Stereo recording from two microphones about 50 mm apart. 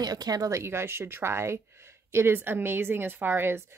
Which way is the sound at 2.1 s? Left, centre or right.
Right.